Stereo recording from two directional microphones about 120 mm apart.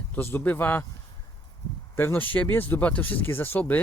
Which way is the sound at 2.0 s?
15° left (ahead or behind).